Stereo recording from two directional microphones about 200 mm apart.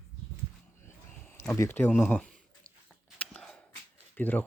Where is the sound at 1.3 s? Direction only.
10° left (ahead or behind).